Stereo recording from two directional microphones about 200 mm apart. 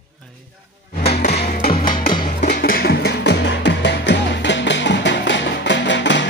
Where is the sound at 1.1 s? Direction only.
55° left (ahead or behind).